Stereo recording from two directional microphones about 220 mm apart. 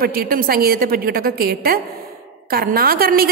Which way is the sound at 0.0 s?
40° right (ahead or behind).